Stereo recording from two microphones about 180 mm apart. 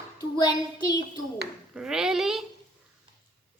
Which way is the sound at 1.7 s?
5° right (ahead or behind).